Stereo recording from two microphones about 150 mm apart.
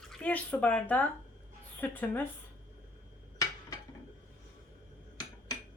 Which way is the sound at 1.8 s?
10° left (ahead or behind).